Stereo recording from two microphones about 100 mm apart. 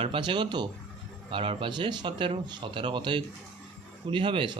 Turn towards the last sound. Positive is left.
turn(degrees=-55)  # may be behind; listen again after turning